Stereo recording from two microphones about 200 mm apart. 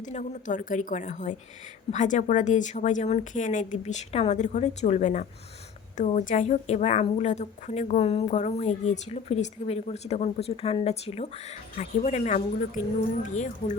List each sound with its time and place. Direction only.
0.0 s a woman's voice: 40° left (ahead or behind)